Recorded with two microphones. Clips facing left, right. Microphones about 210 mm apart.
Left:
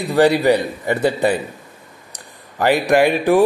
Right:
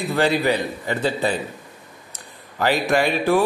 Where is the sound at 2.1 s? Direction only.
15° left (ahead or behind).